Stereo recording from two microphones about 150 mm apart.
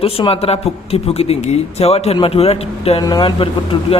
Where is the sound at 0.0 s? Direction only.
40° left (ahead or behind).